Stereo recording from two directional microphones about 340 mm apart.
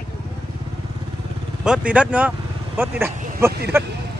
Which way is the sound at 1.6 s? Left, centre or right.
Centre.